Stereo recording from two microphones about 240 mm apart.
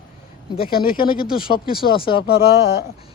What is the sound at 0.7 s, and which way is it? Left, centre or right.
Speech, left.